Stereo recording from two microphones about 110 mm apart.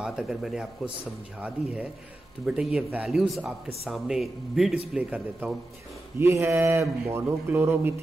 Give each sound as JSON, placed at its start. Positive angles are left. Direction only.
{"t": 0.0, "sound": "a man's voice", "side_deg": -5}